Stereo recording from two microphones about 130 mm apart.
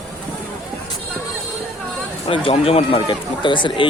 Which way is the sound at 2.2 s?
50° left (ahead or behind).